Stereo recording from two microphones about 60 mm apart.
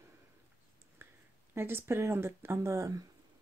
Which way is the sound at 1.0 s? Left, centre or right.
Right.